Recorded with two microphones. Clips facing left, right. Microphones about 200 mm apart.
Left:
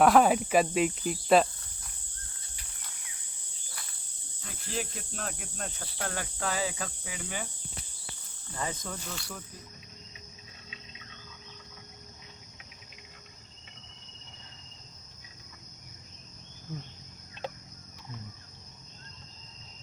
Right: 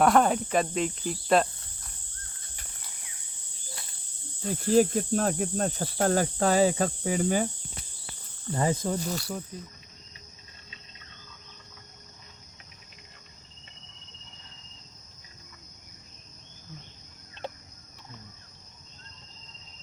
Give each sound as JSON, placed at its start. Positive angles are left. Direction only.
{"t": 0.0, "sound": "cricket", "side_deg": 5}
{"t": 4.4, "sound": "cricket", "side_deg": -40}
{"t": 8.5, "sound": "cricket", "side_deg": -35}